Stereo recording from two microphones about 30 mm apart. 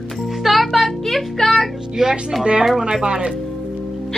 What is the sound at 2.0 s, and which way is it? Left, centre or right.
Speech, centre.